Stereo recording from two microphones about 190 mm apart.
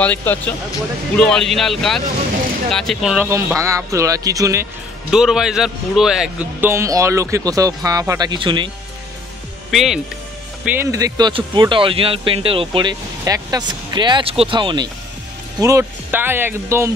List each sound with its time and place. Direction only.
0.0 s speech: 10° left (ahead or behind)
3.3 s speech: 15° right (ahead or behind)
5.1 s speech: 5° right (ahead or behind)
6.7 s speech: 15° right (ahead or behind)
9.7 s speech: centre (ahead or behind); by 14.9 s 25° right (ahead or behind)
15.6 s speech: 15° right (ahead or behind)